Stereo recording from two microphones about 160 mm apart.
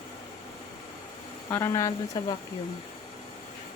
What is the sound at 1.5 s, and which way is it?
Speech, 20° left (ahead or behind).